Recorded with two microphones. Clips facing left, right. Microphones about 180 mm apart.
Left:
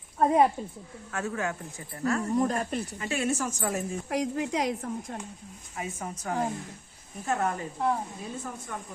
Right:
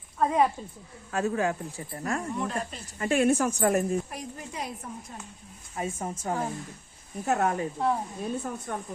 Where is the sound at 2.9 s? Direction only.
50° right (ahead or behind).